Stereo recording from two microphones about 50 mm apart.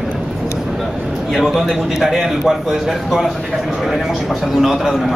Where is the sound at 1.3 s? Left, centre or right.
Centre.